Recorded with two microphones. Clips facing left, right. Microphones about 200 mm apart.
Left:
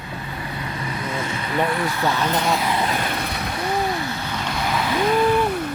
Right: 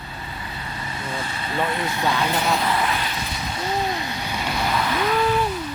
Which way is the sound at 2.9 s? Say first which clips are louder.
Left 3 dB; 55° left (ahead or behind).